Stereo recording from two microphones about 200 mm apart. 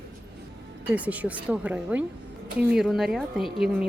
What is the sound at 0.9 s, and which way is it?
A woman's voice, 5° right (ahead or behind).